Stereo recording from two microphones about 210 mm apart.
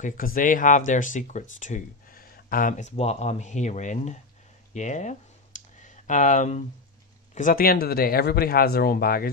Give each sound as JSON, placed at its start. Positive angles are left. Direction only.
{"t": 0.0, "sound": "speech", "side_deg": 40}
{"t": 4.7, "sound": "a sound", "side_deg": 35}
{"t": 7.3, "sound": "speech", "side_deg": 40}